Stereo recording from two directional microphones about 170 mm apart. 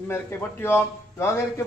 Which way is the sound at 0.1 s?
15° left (ahead or behind).